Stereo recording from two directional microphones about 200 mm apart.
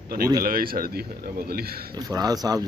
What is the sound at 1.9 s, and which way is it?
Speech, 20° right (ahead or behind).